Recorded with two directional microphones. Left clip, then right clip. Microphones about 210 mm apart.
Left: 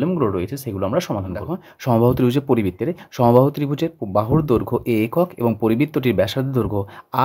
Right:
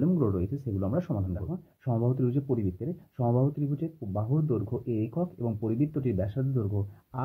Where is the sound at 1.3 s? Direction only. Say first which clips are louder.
Left 11 dB; 45° left (ahead or behind).